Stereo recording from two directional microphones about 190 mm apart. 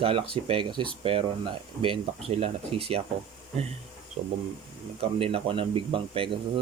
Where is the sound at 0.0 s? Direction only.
30° right (ahead or behind).